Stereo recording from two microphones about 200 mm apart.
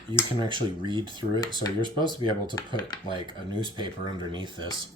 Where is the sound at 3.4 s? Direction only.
25° right (ahead or behind).